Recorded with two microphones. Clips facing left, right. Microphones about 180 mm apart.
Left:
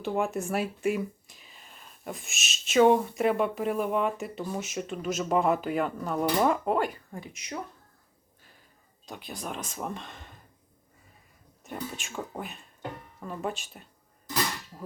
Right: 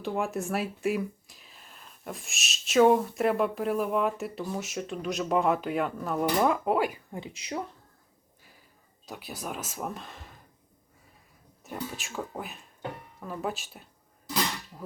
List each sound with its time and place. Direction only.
0.0 s speech: centre (ahead or behind)
7.1 s a woman's voice: 25° right (ahead or behind)
8.4 s a sound: 10° right (ahead or behind)
9.0 s speech: 5° right (ahead or behind)
11.6 s speech: centre (ahead or behind)